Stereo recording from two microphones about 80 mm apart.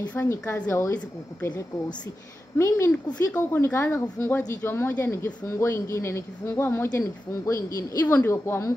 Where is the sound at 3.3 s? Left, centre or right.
Left.